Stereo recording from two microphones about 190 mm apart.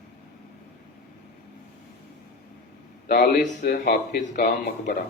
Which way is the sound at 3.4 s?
45° left (ahead or behind).